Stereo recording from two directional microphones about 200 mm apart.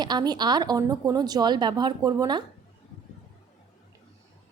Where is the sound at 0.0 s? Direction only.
20° right (ahead or behind).